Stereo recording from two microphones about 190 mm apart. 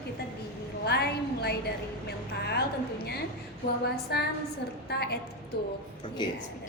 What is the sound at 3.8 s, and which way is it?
A woman's voice, 55° left (ahead or behind).